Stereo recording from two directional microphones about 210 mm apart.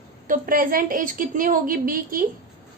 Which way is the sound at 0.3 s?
40° right (ahead or behind).